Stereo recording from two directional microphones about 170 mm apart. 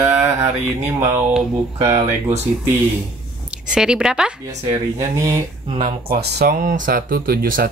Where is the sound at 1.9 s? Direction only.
40° right (ahead or behind).